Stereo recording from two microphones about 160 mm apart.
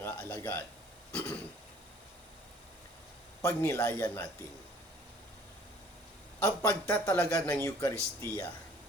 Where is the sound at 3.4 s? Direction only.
20° left (ahead or behind).